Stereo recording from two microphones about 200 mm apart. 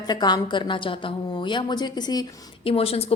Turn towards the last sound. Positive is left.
turn(degrees=30)  # may be behind; listen again after turning